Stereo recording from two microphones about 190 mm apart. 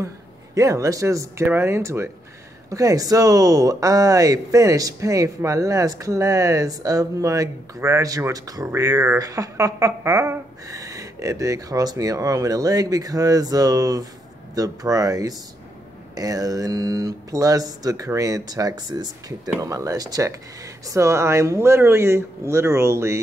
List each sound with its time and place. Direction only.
0.6 s speech: 15° right (ahead or behind)